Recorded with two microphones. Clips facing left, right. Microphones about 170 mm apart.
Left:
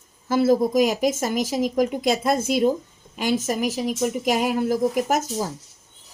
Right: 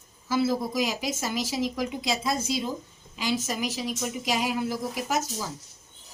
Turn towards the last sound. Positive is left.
turn(degrees=50)  # may be behind; listen again after turning